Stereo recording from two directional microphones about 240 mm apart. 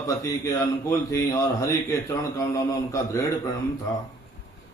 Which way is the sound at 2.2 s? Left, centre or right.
Centre.